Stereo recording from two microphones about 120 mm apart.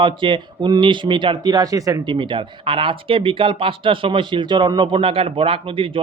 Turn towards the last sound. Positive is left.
turn(degrees=-45)  # may be behind; listen again after turning